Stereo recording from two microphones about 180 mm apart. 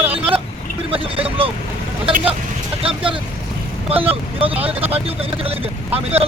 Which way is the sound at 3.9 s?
30° right (ahead or behind).